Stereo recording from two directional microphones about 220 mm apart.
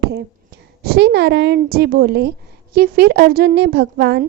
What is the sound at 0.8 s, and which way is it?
A woman's voice, 45° right (ahead or behind).